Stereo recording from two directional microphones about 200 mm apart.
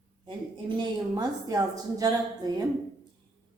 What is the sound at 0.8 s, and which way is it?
A woman's voice, 20° right (ahead or behind).